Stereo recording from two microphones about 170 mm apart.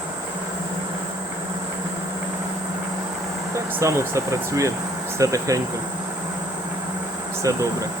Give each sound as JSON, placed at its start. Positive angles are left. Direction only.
{"t": 3.8, "sound": "speech", "side_deg": -15}
{"t": 7.4, "sound": "speech", "side_deg": -20}